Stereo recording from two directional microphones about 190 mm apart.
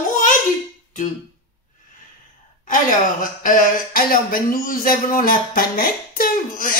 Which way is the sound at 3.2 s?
45° left (ahead or behind).